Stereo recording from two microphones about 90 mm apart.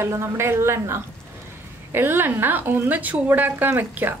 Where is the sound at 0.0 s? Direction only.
30° right (ahead or behind).